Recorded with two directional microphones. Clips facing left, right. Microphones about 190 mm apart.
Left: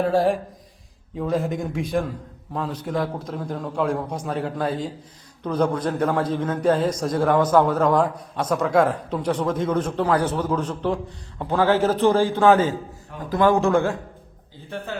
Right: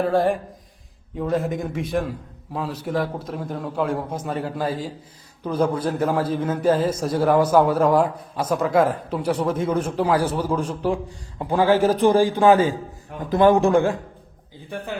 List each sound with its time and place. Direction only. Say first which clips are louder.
0.0 s a man's voice: even; centre (ahead or behind); by 13.9 s 15° right (ahead or behind)